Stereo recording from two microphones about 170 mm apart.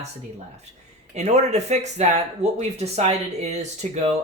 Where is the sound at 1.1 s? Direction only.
40° right (ahead or behind).